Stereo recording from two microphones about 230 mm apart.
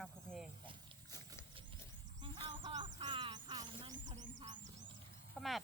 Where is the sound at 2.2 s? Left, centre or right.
Centre.